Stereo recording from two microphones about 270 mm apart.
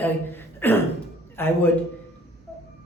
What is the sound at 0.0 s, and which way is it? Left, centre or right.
A man's voice, centre.